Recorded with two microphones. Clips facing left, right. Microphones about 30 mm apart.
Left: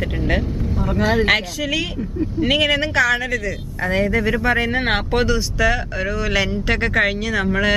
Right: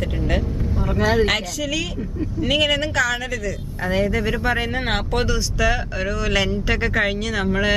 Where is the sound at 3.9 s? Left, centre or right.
Centre.